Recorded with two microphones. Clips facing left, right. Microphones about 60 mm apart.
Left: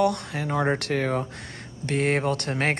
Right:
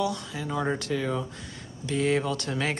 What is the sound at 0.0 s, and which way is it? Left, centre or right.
Speech, left.